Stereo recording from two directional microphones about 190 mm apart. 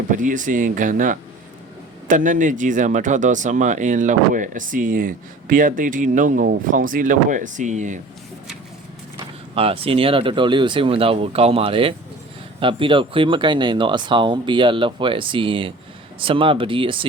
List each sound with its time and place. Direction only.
0.1 s speech: 45° right (ahead or behind)
9.1 s speech: 30° right (ahead or behind)